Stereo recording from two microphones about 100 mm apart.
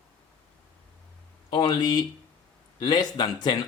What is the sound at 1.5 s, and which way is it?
Speech, 45° left (ahead or behind).